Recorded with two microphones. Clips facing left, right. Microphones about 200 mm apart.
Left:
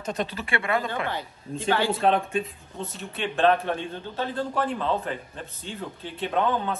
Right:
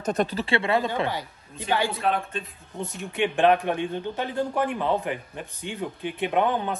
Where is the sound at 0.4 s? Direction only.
25° right (ahead or behind).